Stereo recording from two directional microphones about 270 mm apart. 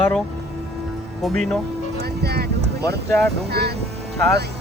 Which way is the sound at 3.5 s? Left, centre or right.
Right.